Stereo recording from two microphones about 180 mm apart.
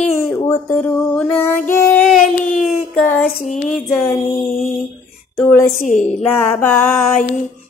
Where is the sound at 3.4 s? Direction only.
40° left (ahead or behind).